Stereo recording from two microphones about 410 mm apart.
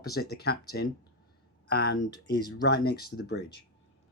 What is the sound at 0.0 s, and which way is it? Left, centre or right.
Speech, left.